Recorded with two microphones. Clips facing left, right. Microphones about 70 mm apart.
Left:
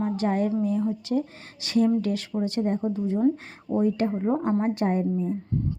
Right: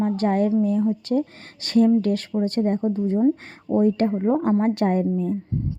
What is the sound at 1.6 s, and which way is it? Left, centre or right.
A woman's voice, right.